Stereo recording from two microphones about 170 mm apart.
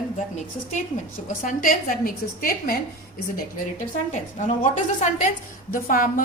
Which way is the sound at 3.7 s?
45° left (ahead or behind).